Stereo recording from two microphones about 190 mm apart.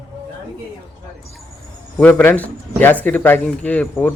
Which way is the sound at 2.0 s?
10° left (ahead or behind).